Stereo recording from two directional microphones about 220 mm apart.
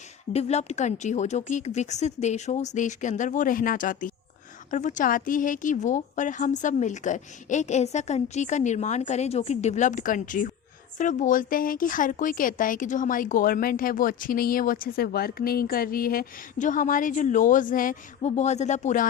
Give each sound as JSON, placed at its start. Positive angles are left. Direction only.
{"t": 0.3, "sound": "a woman's voice", "side_deg": 30}